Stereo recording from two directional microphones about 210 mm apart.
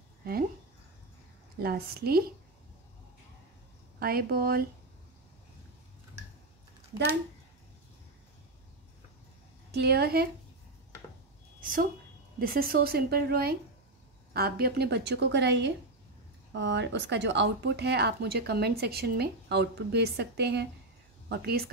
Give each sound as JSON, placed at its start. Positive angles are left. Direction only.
{"t": 1.6, "sound": "speech", "side_deg": -50}
{"t": 4.0, "sound": "speech", "side_deg": -45}
{"t": 9.7, "sound": "speech", "side_deg": -50}
{"t": 11.6, "sound": "a woman's voice", "side_deg": -40}